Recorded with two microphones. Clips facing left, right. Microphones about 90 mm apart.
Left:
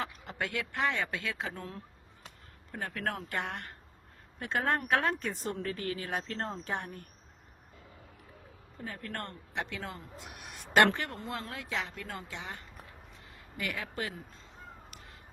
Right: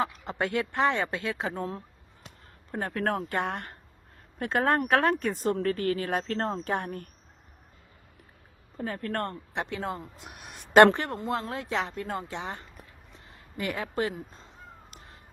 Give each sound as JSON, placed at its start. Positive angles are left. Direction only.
{"t": 0.0, "sound": "speech", "side_deg": -30}
{"t": 2.7, "sound": "speech", "side_deg": -45}
{"t": 8.8, "sound": "speech", "side_deg": -50}
{"t": 9.6, "sound": "speech", "side_deg": -25}